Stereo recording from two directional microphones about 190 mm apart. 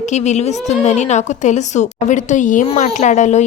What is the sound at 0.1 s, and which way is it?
A woman's voice, 35° left (ahead or behind).